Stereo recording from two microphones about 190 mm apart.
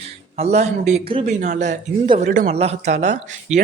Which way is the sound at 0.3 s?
35° right (ahead or behind).